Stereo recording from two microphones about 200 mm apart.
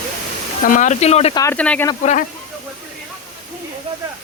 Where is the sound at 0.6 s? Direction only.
40° left (ahead or behind).